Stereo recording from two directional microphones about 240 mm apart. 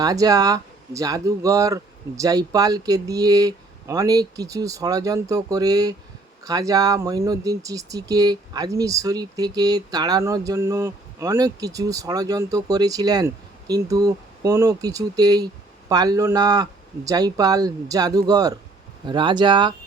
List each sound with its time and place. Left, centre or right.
0.0 s speech: centre